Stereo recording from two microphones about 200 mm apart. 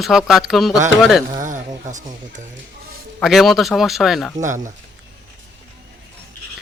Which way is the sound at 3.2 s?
Centre (ahead or behind).